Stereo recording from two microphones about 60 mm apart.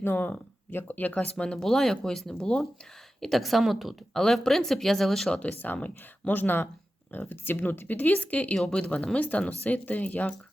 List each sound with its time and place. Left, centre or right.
0.0 s speech: left
1.5 s speech: centre
4.1 s speech: centre
5.5 s speech: left